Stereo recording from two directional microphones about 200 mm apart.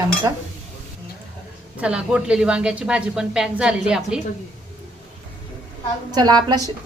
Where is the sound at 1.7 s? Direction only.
5° right (ahead or behind).